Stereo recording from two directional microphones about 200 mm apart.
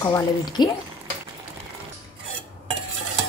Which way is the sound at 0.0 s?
20° left (ahead or behind).